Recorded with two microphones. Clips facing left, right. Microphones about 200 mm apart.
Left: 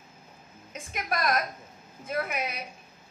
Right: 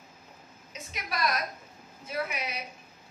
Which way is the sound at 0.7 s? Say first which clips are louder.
Left 3 dB; 50° left (ahead or behind).